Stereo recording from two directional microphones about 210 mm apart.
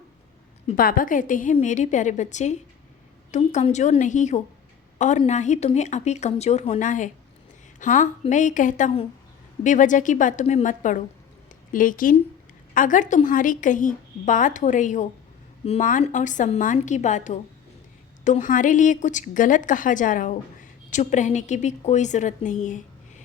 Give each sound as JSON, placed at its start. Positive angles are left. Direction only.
{"t": 0.8, "sound": "a woman's voice", "side_deg": 40}